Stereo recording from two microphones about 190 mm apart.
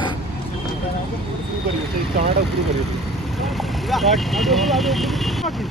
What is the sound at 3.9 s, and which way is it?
Speech, centre (ahead or behind).